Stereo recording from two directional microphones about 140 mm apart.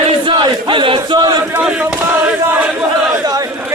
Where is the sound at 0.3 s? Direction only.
35° right (ahead or behind).